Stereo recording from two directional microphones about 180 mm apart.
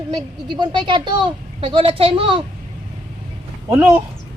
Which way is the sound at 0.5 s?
25° right (ahead or behind).